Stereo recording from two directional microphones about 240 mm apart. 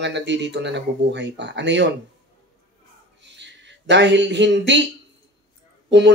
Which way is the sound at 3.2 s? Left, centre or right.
Right.